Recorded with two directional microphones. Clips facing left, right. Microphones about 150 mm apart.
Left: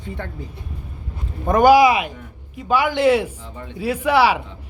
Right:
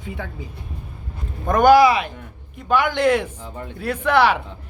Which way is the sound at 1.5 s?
5° left (ahead or behind).